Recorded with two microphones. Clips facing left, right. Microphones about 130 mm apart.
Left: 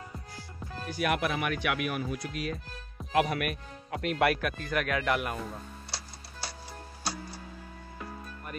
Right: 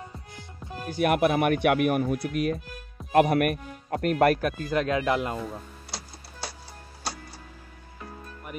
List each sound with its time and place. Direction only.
0.4 s music: 20° right (ahead or behind)
0.8 s speech: 50° right (ahead or behind); by 5.4 s 25° right (ahead or behind)